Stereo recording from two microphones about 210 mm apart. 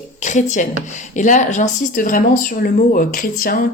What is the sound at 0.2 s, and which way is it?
A woman's voice, 35° left (ahead or behind).